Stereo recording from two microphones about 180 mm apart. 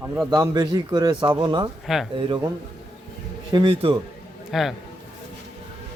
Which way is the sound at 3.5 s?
25° right (ahead or behind).